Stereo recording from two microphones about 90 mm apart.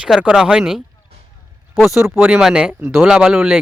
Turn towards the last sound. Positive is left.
turn(degrees=-5)  # may be behind; listen again after turning